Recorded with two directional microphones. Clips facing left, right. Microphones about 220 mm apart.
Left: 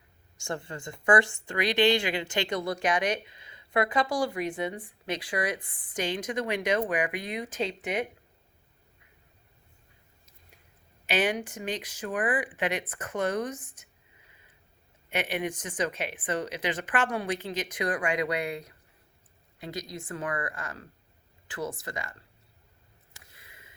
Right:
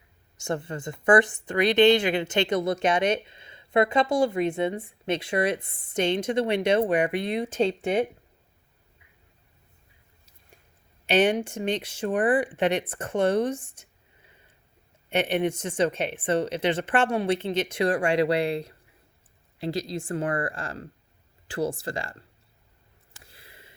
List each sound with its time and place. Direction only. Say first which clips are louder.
0.3 s speech: right 5 dB; 20° right (ahead or behind)
11.0 s speech: right 6 dB; 30° right (ahead or behind)
15.1 s speech: right 6 dB; 30° right (ahead or behind)
23.2 s a sound: right 6 dB; 30° right (ahead or behind)